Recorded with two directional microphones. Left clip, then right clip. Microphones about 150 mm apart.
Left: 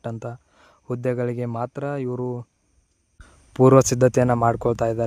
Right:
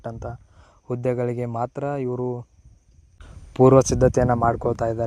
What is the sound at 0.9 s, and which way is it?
Speech, 15° left (ahead or behind).